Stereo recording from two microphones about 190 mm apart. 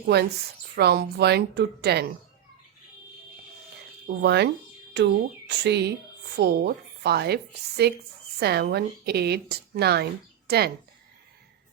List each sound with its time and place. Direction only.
0.0 s a woman's voice: 60° right (ahead or behind)
4.2 s a woman's voice: 60° right (ahead or behind)